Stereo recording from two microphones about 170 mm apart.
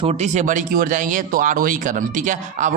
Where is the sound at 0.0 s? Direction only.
40° right (ahead or behind).